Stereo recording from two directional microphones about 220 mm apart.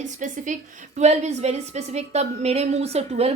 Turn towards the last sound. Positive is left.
turn(degrees=-30)  # may be behind; listen again after turning